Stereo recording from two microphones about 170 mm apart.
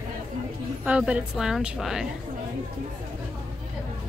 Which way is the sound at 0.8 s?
5° right (ahead or behind).